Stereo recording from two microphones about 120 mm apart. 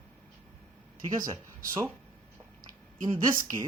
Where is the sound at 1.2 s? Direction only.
30° right (ahead or behind).